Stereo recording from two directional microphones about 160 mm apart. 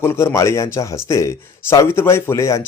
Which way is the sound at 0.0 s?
15° left (ahead or behind).